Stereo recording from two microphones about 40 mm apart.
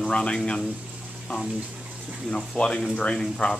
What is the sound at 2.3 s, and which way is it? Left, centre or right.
Speech, left.